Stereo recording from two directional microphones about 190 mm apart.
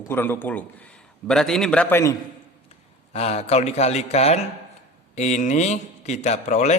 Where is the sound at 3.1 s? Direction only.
35° left (ahead or behind).